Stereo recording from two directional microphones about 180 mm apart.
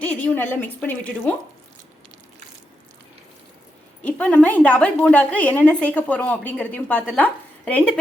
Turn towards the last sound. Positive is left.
turn(degrees=5)  # may be behind; listen again after turning